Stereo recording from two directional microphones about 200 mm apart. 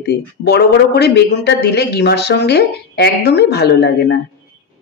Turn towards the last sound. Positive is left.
turn(degrees=55)  # may be behind; listen again after turning